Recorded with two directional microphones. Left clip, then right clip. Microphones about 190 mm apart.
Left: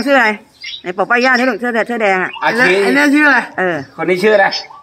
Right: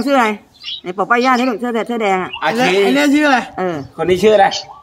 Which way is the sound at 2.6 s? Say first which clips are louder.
Left 2 dB; 25° right (ahead or behind).